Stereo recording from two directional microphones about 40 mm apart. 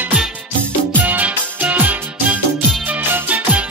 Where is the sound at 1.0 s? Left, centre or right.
Right.